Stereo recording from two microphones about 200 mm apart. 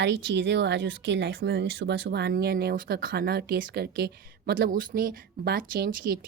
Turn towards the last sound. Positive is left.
turn(degrees=-50)  # may be behind; listen again after turning